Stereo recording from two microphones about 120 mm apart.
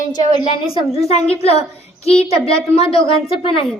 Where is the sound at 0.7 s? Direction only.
55° left (ahead or behind).